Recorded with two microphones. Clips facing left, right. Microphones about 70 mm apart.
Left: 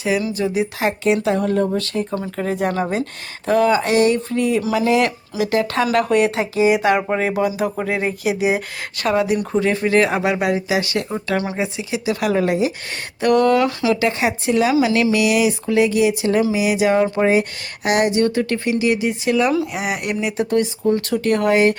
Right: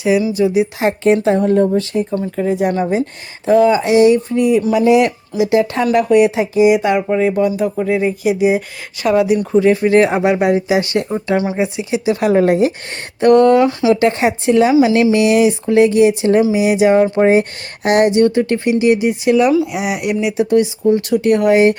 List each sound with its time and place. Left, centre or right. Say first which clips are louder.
0.0 s speech: right 6 dB; centre
0.8 s speech: right 3 dB; right
1.7 s speech: right 5 dB; centre
2.6 s speech: right 2 dB; centre
3.4 s speech: right 5 dB; centre
5.8 s speech: right 4 dB; centre
9.9 s speech: right 5 dB; right
11.3 s speech: right 5 dB; centre
11.8 s speech: right 5 dB; right
13.9 s speech: right 5 dB; right
19.5 s speech: right 5 dB; centre; by 21.8 s right